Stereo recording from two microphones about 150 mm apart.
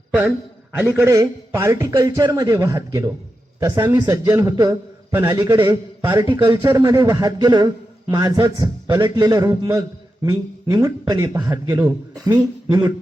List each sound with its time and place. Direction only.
0.8 s a man's voice: 15° right (ahead or behind)